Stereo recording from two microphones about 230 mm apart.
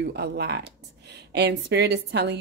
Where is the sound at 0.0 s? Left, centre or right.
Right.